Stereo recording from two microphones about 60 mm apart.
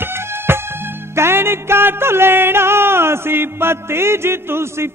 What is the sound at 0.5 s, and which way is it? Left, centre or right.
Music, right.